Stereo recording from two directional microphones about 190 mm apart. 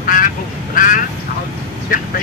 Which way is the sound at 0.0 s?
45° left (ahead or behind).